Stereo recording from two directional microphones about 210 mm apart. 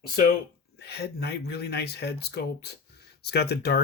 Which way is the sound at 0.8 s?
50° left (ahead or behind).